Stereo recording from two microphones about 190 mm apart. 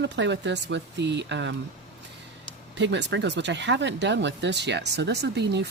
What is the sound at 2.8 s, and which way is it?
Speech, 70° right (ahead or behind).